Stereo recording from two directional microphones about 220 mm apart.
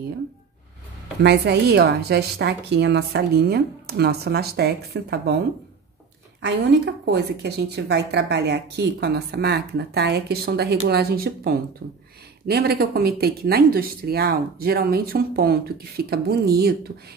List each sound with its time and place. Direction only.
1.2 s a woman's voice: 50° right (ahead or behind)
6.4 s a woman's voice: 50° right (ahead or behind)